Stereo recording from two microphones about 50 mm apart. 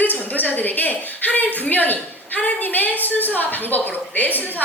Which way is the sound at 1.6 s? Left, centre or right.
Left.